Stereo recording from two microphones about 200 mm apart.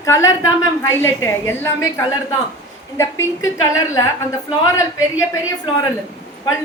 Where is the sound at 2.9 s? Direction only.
15° left (ahead or behind).